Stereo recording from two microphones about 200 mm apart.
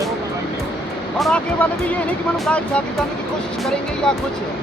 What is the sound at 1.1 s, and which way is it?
Speech, centre (ahead or behind).